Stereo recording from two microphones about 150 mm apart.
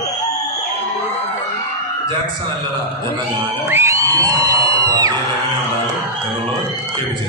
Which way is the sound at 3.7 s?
15° right (ahead or behind).